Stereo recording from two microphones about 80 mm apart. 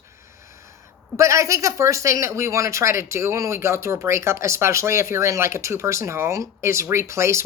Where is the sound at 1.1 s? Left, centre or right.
Right.